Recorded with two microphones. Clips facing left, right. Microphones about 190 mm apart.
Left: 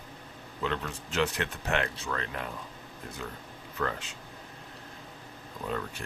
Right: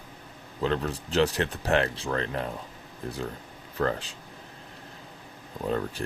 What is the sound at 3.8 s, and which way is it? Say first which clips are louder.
Speech: right 6 dB; 35° right (ahead or behind).